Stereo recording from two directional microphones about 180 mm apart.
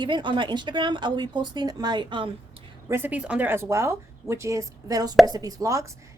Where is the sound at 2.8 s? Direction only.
10° right (ahead or behind).